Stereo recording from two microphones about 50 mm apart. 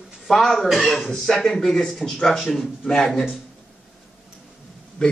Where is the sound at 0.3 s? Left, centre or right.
Centre.